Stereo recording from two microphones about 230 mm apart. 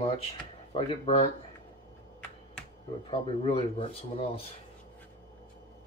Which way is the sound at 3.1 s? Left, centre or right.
Left.